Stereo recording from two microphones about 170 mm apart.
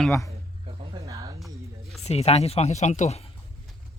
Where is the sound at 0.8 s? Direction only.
25° right (ahead or behind).